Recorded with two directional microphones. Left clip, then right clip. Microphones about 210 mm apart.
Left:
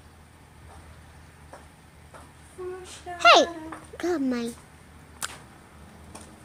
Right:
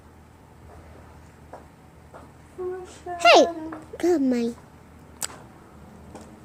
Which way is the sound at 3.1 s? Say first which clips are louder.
Right 2 dB; 10° right (ahead or behind).